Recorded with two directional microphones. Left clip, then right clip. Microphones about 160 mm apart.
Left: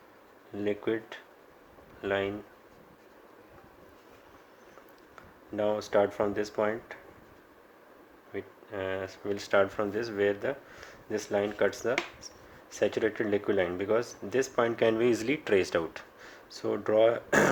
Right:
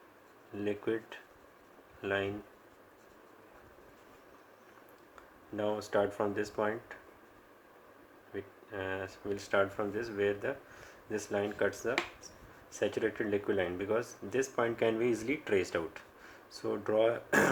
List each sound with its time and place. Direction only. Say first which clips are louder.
0.5 s speech: left 4 dB; 35° left (ahead or behind)
5.5 s speech: left 5 dB; 35° left (ahead or behind)
8.3 s speech: left 4 dB; 40° left (ahead or behind)